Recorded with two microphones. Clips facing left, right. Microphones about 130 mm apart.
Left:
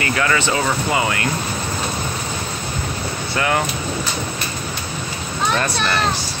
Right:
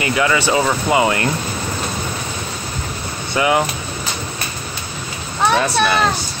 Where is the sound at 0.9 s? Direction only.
25° right (ahead or behind).